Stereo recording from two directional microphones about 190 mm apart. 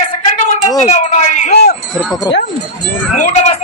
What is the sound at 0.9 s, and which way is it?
Speech, 40° left (ahead or behind).